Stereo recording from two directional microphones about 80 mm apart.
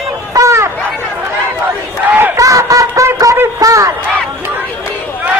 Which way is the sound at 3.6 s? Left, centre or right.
Right.